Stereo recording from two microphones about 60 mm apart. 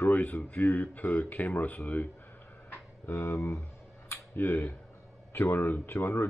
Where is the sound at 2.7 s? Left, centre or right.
Left.